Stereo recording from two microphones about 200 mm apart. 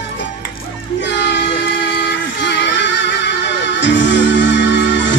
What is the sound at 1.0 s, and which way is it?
Child singing, 60° left (ahead or behind).